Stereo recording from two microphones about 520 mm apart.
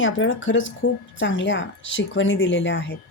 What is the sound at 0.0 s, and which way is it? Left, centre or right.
Speech, left.